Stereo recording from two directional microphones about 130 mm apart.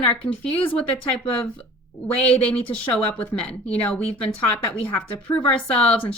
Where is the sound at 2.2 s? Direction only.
10° left (ahead or behind).